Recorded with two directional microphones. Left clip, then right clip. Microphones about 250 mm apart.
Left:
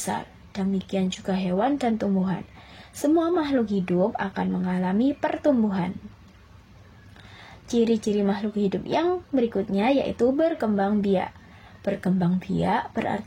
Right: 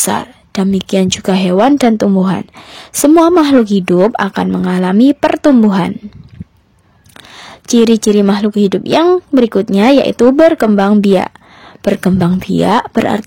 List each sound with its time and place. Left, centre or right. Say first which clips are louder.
0.0 s a woman's voice: right 14 dB; right
7.6 s a woman's voice: right 13 dB; right